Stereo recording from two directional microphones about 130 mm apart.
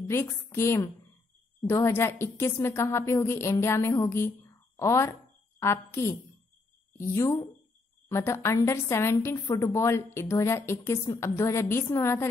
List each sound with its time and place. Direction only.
0.0 s a woman's voice: 20° left (ahead or behind)